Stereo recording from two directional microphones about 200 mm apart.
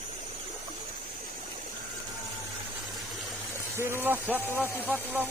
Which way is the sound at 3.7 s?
10° right (ahead or behind).